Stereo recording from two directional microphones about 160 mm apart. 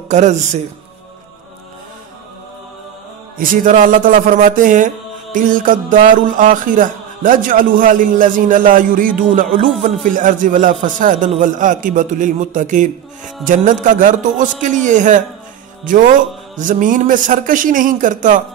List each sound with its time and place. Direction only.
0.1 s a man's voice: 45° right (ahead or behind)
3.3 s a man's voice: 60° right (ahead or behind)